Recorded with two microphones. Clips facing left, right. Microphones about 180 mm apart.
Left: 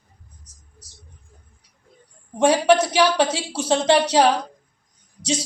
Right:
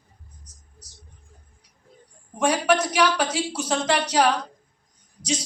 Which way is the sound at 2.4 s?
30° left (ahead or behind).